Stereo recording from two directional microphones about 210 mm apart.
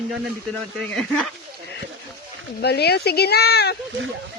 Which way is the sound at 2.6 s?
50° left (ahead or behind).